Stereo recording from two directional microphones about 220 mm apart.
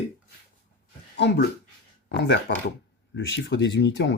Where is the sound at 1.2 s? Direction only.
50° left (ahead or behind).